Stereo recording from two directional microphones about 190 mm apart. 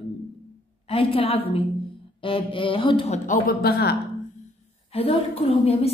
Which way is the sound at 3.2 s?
50° left (ahead or behind).